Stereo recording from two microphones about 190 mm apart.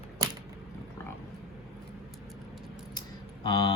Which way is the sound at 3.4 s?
25° left (ahead or behind).